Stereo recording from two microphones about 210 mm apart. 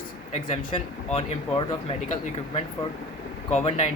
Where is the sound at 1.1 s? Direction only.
30° left (ahead or behind).